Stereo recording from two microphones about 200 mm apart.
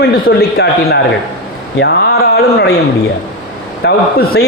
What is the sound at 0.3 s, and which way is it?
A woman's voice, 55° left (ahead or behind).